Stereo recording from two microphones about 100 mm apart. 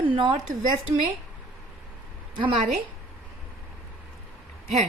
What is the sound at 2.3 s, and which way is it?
Speech, 60° right (ahead or behind).